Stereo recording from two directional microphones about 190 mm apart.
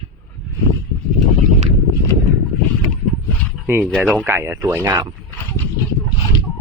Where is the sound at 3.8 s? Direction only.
5° left (ahead or behind).